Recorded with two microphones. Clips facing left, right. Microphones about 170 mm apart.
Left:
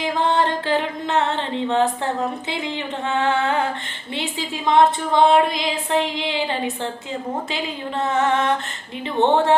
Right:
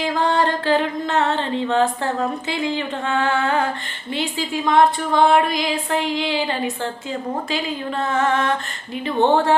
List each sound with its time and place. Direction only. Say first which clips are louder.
0.4 s a woman's voice: right 2 dB; 20° left (ahead or behind)
8.0 s a woman's voice: left 1 dB; 20° left (ahead or behind)